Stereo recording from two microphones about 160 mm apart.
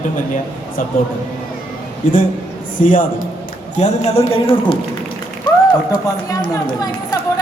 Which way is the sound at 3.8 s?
40° left (ahead or behind).